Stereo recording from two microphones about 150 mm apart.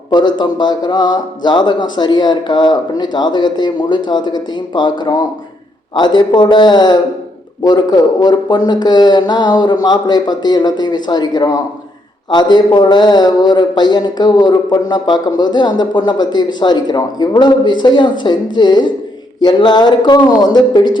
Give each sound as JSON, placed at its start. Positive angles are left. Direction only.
{"t": 0.1, "sound": "a man's voice", "side_deg": 30}